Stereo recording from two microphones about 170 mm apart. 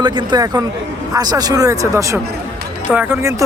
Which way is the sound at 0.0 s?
25° right (ahead or behind).